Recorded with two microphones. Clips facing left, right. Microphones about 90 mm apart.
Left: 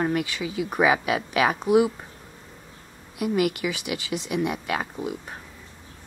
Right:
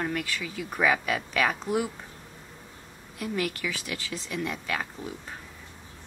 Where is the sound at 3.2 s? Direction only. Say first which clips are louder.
Left 7 dB; 15° left (ahead or behind).